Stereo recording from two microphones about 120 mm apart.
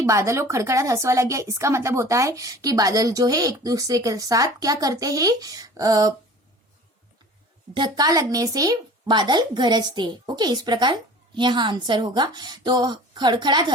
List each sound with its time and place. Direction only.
0.0 s a woman's voice: 25° right (ahead or behind)
7.7 s a woman's voice: 35° right (ahead or behind)